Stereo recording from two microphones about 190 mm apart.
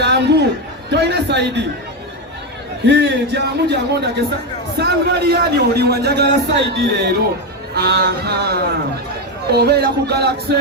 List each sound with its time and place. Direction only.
0.0 s chatter: 60° right (ahead or behind)
0.9 s a man's voice: 60° right (ahead or behind)
2.8 s a man's voice: 65° right (ahead or behind)